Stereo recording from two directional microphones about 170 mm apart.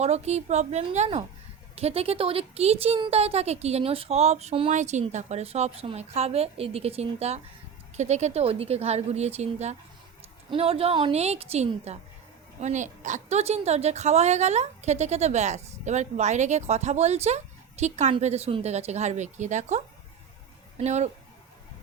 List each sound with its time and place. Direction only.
0.0 s a woman's voice: 40° right (ahead or behind)